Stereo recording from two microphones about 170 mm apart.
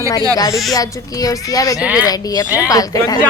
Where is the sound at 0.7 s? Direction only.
20° left (ahead or behind).